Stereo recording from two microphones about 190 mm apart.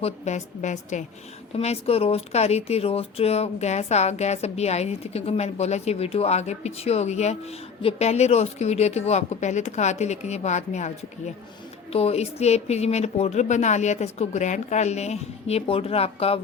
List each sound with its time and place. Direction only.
0.0 s speech: 35° left (ahead or behind)